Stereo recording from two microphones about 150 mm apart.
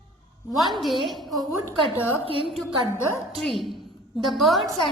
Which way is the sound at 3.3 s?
Centre (ahead or behind).